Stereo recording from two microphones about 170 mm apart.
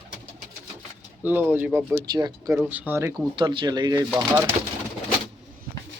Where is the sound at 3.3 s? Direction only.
30° right (ahead or behind).